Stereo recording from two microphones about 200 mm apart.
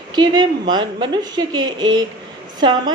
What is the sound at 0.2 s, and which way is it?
A woman's voice, 20° right (ahead or behind).